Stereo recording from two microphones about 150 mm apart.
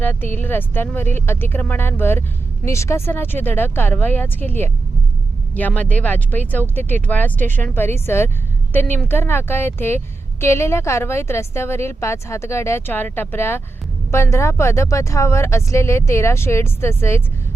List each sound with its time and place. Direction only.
0.0 s a woman's voice: 15° left (ahead or behind)